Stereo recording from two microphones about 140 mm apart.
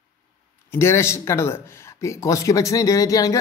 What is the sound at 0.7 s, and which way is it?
Speech, 20° left (ahead or behind).